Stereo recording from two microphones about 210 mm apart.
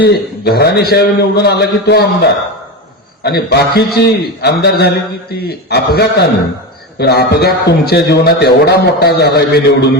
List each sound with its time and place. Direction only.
0.0 s a man's voice: 50° left (ahead or behind)
3.2 s a man's voice: 50° left (ahead or behind)